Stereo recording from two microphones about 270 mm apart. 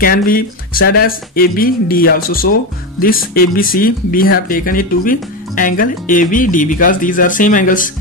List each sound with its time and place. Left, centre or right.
0.0 s speech: left